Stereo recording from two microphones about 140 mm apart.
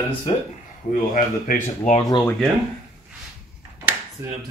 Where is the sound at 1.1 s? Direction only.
70° left (ahead or behind).